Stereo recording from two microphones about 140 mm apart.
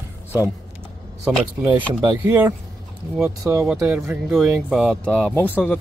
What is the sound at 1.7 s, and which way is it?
Speech, 10° right (ahead or behind).